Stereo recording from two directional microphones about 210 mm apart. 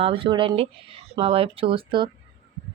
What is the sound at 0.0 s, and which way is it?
A woman's voice, 25° right (ahead or behind).